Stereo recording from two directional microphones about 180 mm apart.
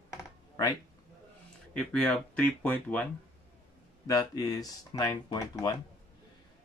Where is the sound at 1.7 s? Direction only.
5° left (ahead or behind).